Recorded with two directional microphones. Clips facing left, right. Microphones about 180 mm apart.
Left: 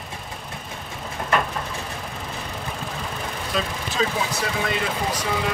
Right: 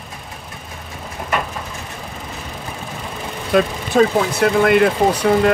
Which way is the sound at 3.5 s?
55° right (ahead or behind).